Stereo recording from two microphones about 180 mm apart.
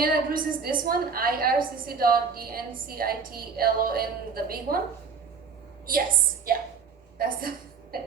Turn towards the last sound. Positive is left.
turn(degrees=-55)  # may be behind; listen again after turning